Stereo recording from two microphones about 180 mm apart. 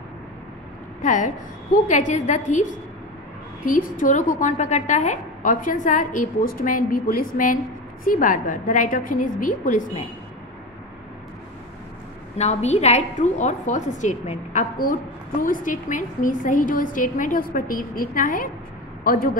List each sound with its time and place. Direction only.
1.0 s a woman's voice: 45° left (ahead or behind)
12.4 s a woman's voice: 40° left (ahead or behind)